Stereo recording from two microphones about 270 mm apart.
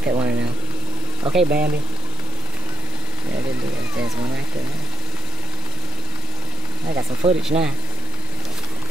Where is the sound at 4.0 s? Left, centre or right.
Centre.